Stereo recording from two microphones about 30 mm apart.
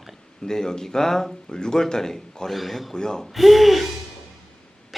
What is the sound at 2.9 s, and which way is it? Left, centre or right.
Speech, left.